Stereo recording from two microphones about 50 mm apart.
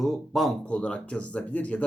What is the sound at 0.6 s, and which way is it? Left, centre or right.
Speech, left.